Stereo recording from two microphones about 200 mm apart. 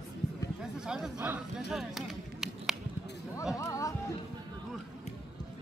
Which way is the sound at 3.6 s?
15° left (ahead or behind).